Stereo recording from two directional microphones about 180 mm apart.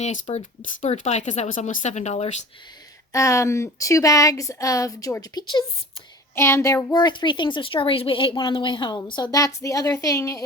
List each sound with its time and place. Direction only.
0.0 s speech: 40° left (ahead or behind)
3.1 s a woman's voice: 15° left (ahead or behind)
6.9 s a woman's voice: 25° left (ahead or behind)